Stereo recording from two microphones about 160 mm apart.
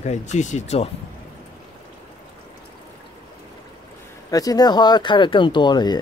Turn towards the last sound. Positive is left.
turn(degrees=25)  # may be behind; listen again after turning